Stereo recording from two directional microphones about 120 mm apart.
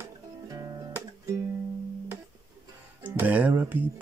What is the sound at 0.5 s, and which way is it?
Music, 30° right (ahead or behind).